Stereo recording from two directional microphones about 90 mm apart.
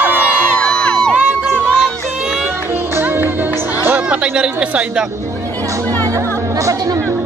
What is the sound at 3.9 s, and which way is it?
Music, 10° right (ahead or behind).